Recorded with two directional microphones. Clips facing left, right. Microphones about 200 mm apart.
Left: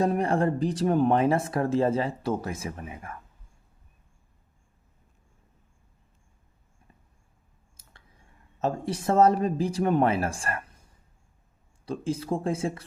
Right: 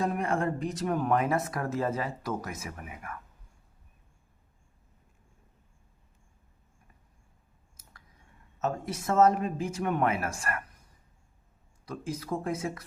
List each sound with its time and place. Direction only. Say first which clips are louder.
0.0 s speech: left 5 dB; 35° left (ahead or behind)
7.8 s speech: left 1 dB; 30° left (ahead or behind)
11.9 s speech: left 5 dB; 30° left (ahead or behind)